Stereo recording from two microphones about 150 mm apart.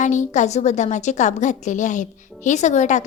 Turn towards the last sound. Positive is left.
turn(degrees=55)  # may be behind; listen again after turning